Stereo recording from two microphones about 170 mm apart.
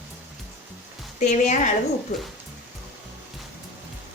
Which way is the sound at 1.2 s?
45° left (ahead or behind).